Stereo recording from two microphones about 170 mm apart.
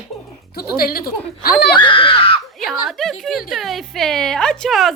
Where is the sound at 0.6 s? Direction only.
60° left (ahead or behind).